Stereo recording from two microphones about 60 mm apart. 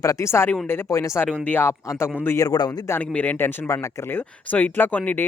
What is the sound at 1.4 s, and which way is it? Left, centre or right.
Speech, left.